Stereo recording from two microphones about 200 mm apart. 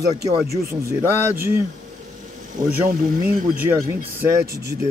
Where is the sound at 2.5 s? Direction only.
45° right (ahead or behind).